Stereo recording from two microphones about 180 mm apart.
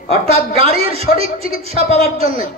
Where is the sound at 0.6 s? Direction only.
35° right (ahead or behind).